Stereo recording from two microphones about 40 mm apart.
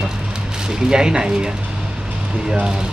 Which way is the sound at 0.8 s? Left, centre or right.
Centre.